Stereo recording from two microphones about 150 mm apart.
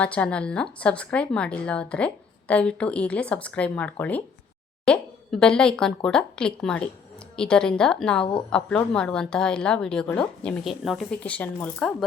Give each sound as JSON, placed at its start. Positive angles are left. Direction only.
{"t": 0.0, "sound": "a woman's voice", "side_deg": 10}